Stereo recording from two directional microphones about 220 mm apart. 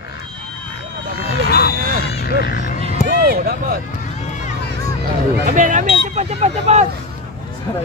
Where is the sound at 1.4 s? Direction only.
45° left (ahead or behind).